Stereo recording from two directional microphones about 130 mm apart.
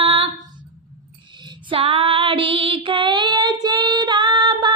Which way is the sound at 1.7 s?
45° right (ahead or behind).